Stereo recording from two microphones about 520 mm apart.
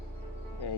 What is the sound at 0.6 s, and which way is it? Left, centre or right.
Speech, left.